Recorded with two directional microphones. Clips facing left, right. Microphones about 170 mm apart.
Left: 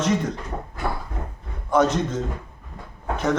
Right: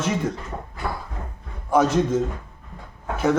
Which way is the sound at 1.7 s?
10° right (ahead or behind).